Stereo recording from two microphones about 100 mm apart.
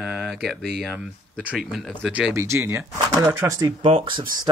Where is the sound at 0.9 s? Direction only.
15° right (ahead or behind).